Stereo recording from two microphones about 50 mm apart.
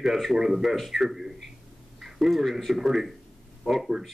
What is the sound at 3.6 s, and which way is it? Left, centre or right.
Speech, centre.